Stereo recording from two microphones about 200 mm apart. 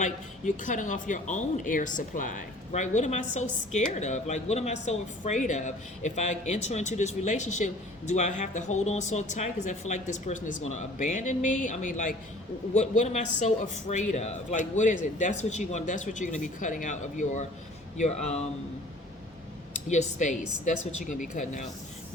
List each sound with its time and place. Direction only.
0.0 s speech: 40° left (ahead or behind)
19.9 s speech: 35° left (ahead or behind)